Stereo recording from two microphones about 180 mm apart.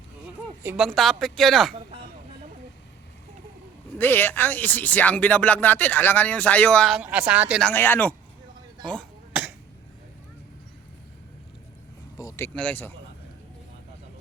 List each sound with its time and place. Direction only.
0.6 s speech: 10° right (ahead or behind)
0.9 s speech: centre (ahead or behind)
3.9 s speech: 10° left (ahead or behind); by 7.6 s 5° right (ahead or behind)
7.6 s speech: 10° left (ahead or behind)
9.3 s cough: 5° right (ahead or behind)
12.1 s speech: 20° left (ahead or behind)
12.5 s speech: 10° left (ahead or behind)